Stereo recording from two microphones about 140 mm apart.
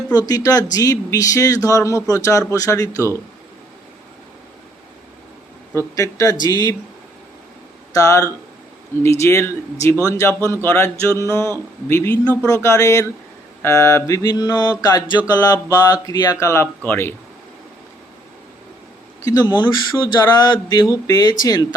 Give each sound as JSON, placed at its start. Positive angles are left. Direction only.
{"t": 0.1, "sound": "speech", "side_deg": 30}
{"t": 5.7, "sound": "speech", "side_deg": 25}
{"t": 7.9, "sound": "speech", "side_deg": 25}
{"t": 10.6, "sound": "music", "side_deg": 15}
{"t": 11.2, "sound": "speech", "side_deg": 20}
{"t": 11.9, "sound": "music", "side_deg": 15}
{"t": 12.6, "sound": "speech", "side_deg": 20}
{"t": 19.2, "sound": "speech", "side_deg": 25}